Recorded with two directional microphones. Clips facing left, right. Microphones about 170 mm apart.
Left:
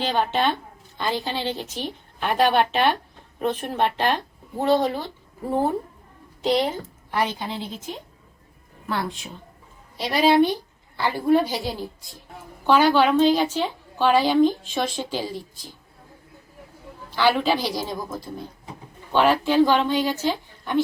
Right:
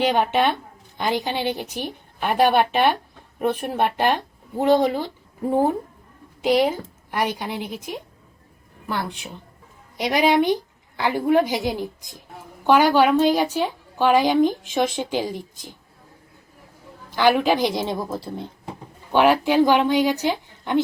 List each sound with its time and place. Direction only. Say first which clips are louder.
0.0 s a woman's voice: right 3 dB; 15° right (ahead or behind)
10.0 s a woman's voice: even; 15° right (ahead or behind)
17.1 s a woman's voice: right 3 dB; 15° right (ahead or behind); by 18.4 s 30° right (ahead or behind)
19.1 s a woman's voice: right 2 dB; 15° right (ahead or behind)